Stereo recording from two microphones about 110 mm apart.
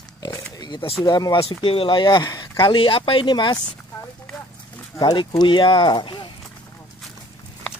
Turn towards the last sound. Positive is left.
turn(degrees=45)  # may be behind; listen again after turning